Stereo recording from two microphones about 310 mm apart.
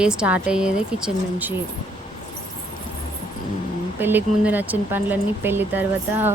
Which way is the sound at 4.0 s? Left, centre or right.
Centre.